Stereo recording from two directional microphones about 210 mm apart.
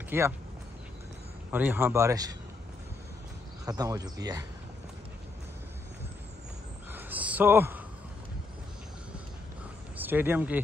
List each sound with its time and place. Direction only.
0.1 s a man's voice: 10° right (ahead or behind)
1.5 s a man's voice: 10° right (ahead or behind)
3.6 s a man's voice: 15° right (ahead or behind)
6.9 s a sound: 10° right (ahead or behind)
9.9 s speech: 10° right (ahead or behind)